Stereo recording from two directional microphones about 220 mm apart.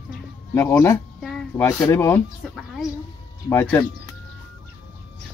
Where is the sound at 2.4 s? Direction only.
Centre (ahead or behind).